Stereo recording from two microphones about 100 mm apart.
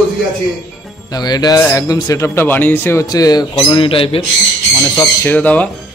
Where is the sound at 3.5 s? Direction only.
60° left (ahead or behind).